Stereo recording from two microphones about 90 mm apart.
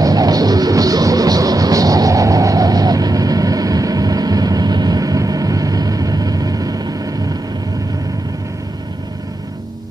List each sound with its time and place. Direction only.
0.0 s music: 45° right (ahead or behind)